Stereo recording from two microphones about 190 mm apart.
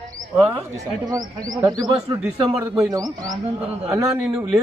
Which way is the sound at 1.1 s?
20° right (ahead or behind).